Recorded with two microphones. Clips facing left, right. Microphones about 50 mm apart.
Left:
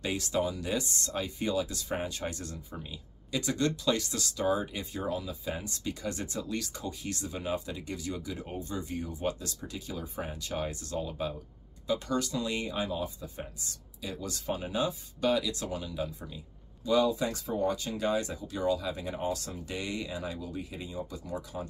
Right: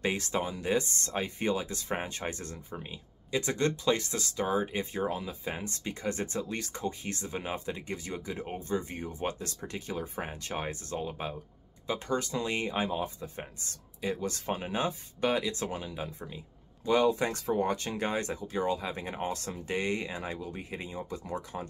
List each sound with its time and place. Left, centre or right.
0.0 s speech: right